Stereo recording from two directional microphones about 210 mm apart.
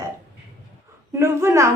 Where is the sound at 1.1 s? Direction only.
15° right (ahead or behind).